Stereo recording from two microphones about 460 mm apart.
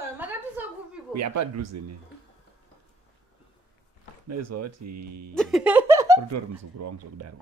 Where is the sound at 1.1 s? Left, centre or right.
Right.